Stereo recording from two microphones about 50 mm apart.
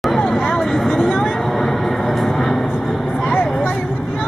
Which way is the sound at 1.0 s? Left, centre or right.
Centre.